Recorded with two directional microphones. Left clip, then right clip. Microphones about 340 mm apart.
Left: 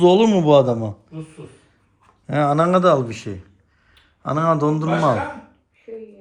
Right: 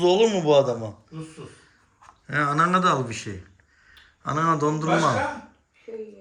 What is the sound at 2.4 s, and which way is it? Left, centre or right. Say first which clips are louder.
Speech: left 5 dB; centre.